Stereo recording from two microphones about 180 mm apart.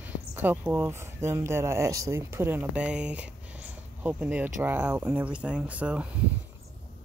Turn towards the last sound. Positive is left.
turn(degrees=-5)  # may be behind; listen again after turning